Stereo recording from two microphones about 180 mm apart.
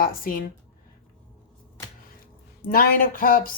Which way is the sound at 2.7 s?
55° left (ahead or behind).